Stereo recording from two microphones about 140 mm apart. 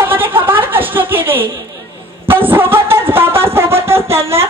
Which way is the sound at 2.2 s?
15° right (ahead or behind).